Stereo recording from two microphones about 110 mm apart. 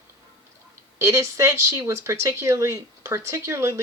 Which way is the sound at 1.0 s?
25° right (ahead or behind).